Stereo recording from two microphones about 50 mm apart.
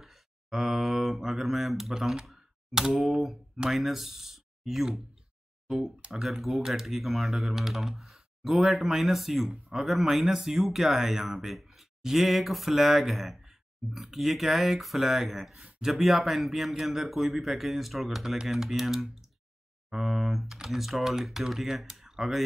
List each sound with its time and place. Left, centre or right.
0.0 s mantra: centre
2.9 s speech: centre
6.2 s speech: centre